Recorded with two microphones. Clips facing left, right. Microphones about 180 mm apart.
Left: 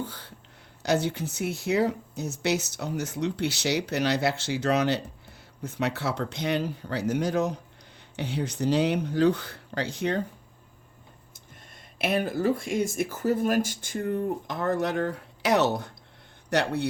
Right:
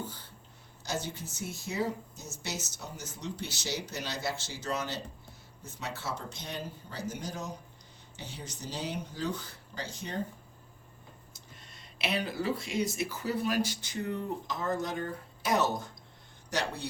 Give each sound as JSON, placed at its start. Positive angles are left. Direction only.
{"t": 0.0, "sound": "speech", "side_deg": 70}
{"t": 11.9, "sound": "speech", "side_deg": 50}